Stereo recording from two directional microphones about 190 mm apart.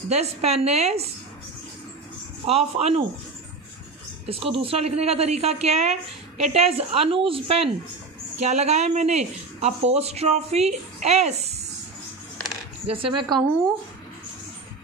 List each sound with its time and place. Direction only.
0.1 s a woman's voice: 35° right (ahead or behind)
2.4 s a woman's voice: 30° right (ahead or behind)
4.3 s a woman's voice: 30° right (ahead or behind)
12.9 s a woman's voice: 25° right (ahead or behind)